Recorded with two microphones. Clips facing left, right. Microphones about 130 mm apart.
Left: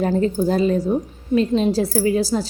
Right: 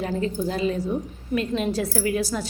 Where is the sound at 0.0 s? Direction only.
40° left (ahead or behind).